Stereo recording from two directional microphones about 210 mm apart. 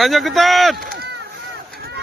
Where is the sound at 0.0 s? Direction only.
Centre (ahead or behind).